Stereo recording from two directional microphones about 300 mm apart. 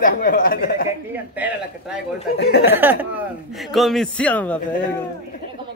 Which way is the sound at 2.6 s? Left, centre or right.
Centre.